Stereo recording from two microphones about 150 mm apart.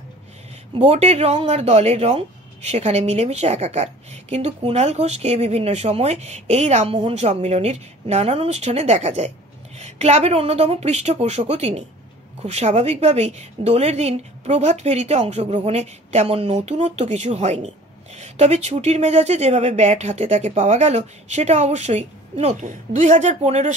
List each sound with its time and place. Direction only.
0.7 s speech: 45° right (ahead or behind)